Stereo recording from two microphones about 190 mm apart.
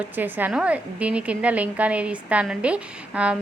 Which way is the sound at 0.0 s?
10° right (ahead or behind).